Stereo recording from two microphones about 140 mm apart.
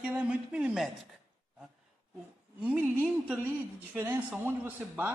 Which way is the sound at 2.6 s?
10° right (ahead or behind).